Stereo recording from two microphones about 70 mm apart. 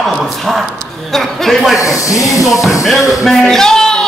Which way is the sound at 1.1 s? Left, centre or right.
Centre.